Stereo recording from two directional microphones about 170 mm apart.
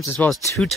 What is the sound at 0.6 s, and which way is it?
Speech, centre (ahead or behind).